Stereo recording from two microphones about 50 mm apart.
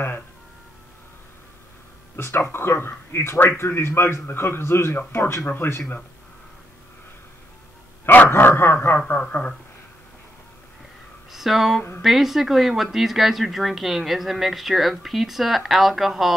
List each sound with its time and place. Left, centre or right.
2.1 s a man's voice: left
5.4 s speech: left
5.7 s a man's voice: left
8.0 s dog: left
8.3 s speech: left
9.0 s speech: left
11.3 s speech: centre